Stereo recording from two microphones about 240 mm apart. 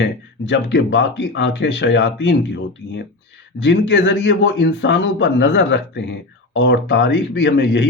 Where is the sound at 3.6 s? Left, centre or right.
Left.